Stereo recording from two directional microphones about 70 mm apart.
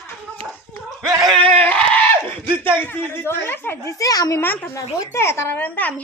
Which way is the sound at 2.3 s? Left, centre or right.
Left.